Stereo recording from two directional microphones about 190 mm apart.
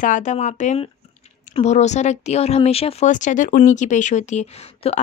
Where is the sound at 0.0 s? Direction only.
40° left (ahead or behind).